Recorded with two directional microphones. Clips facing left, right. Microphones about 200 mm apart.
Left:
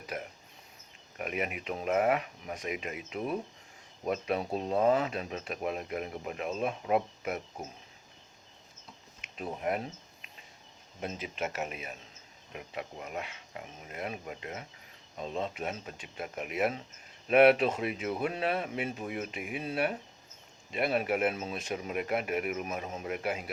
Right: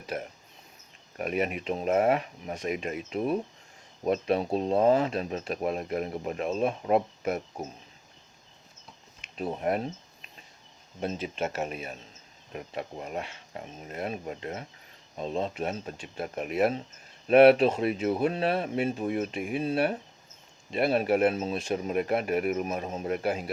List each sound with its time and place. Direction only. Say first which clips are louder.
0.1 s a sound: right 4 dB; 40° right (ahead or behind)
1.2 s speech: right 6 dB; 35° right (ahead or behind)
9.4 s speech: right 4 dB; 35° right (ahead or behind)
11.0 s speech: right 5 dB; 30° right (ahead or behind)